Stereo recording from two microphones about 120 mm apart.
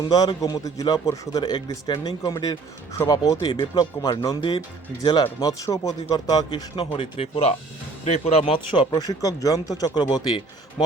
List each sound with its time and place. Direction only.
0.1 s a man's voice: 30° left (ahead or behind)
4.9 s a man's voice: 35° left (ahead or behind)
6.7 s speech: 50° left (ahead or behind)
8.7 s a man's voice: 35° left (ahead or behind)